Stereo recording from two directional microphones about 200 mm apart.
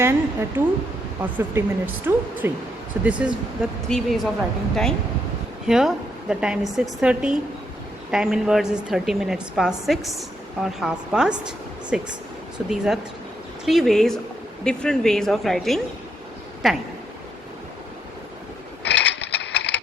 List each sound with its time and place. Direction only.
0.0 s a woman's voice: 10° right (ahead or behind)
18.8 s mechanisms: 60° left (ahead or behind)